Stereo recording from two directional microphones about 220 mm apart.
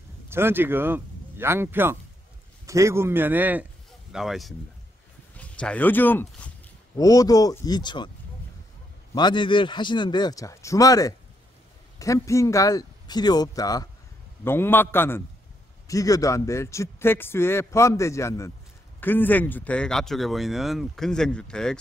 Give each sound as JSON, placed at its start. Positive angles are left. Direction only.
{"t": 0.3, "sound": "a man's voice", "side_deg": -10}
{"t": 9.1, "sound": "a man's voice", "side_deg": 20}